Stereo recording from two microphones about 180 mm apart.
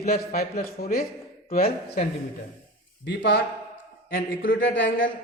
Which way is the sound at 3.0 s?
85° left.